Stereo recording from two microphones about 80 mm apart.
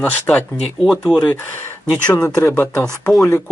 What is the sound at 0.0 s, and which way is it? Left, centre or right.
Speech, left.